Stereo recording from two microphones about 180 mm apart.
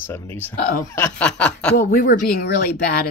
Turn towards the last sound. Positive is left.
turn(degrees=55)  # may be behind; listen again after turning